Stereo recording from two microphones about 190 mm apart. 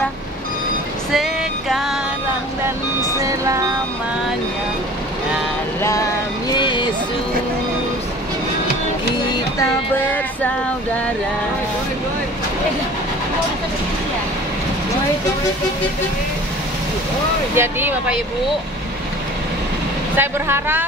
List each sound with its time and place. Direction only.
1.1 s music: centre (ahead or behind)
3.2 s vehicle: 15° right (ahead or behind)
5.8 s vehicle: 15° left (ahead or behind)
17.6 s speech: 10° right (ahead or behind)
20.2 s speech: 10° right (ahead or behind)